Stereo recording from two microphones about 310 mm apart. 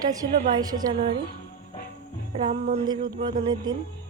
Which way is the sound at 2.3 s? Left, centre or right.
Centre.